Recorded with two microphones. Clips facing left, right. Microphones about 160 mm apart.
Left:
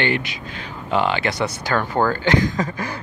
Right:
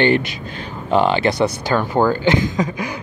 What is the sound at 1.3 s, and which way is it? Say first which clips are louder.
Speech: right 4 dB; 15° right (ahead or behind).